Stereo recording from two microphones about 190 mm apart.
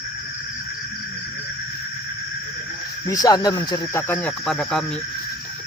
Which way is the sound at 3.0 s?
20° left (ahead or behind).